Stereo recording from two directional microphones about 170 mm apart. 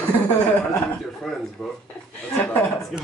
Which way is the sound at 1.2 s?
5° left (ahead or behind).